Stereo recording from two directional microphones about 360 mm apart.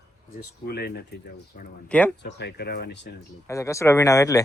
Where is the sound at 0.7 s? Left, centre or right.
Left.